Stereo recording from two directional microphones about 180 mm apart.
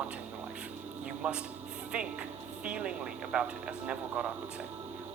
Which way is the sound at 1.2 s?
10° right (ahead or behind).